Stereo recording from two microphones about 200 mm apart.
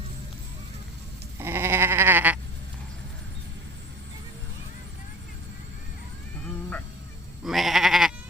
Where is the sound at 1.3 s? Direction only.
10° right (ahead or behind).